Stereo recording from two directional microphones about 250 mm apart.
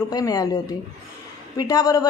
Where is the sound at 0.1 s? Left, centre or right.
Centre.